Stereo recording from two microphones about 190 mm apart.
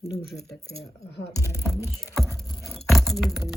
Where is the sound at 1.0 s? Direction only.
65° left (ahead or behind).